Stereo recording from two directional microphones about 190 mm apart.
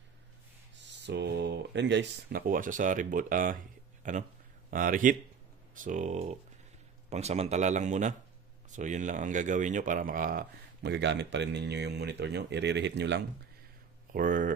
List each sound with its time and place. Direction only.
1.0 s speech: 65° right (ahead or behind)
14.1 s speech: 45° right (ahead or behind)